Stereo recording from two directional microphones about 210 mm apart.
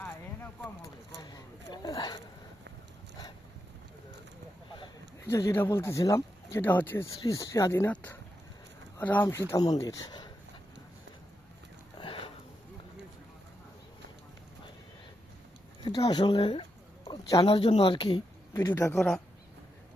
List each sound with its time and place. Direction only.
0.0 s a sound: 10° left (ahead or behind)
4.8 s speech: 15° left (ahead or behind)
11.9 s sniff: 25° left (ahead or behind)
15.8 s speech: 20° left (ahead or behind)
17.1 s a sound: 15° left (ahead or behind)
17.4 s speech: 25° left (ahead or behind); by 19.2 s 5° left (ahead or behind)